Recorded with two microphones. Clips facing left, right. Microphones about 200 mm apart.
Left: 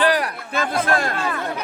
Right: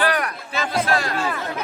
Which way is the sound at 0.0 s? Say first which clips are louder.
Left 3 dB; 30° left (ahead or behind).